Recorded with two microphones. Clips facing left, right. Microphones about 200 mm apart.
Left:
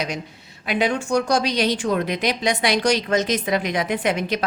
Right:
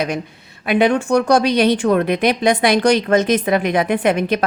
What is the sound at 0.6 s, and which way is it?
A woman's voice, 60° right (ahead or behind).